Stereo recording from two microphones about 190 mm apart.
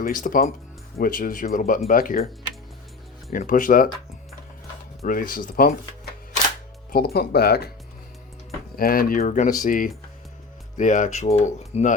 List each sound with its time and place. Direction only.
0.0 s speech: 45° left (ahead or behind)
3.2 s speech: 45° left (ahead or behind)
5.0 s speech: 45° left (ahead or behind)
6.9 s speech: 55° left (ahead or behind)
8.7 s speech: 50° left (ahead or behind)